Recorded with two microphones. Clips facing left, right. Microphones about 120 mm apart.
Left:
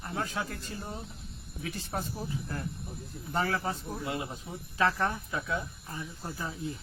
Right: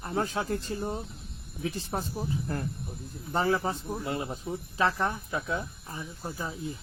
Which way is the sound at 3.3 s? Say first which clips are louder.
Right 4 dB; 25° right (ahead or behind).